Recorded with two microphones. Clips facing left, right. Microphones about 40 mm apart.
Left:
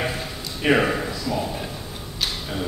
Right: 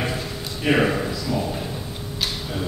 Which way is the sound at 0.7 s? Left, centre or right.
Centre.